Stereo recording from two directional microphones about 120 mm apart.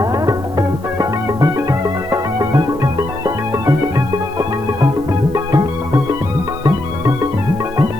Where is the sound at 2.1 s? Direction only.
30° right (ahead or behind).